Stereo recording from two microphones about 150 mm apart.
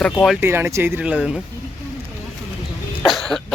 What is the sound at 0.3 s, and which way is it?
Speech, 15° right (ahead or behind).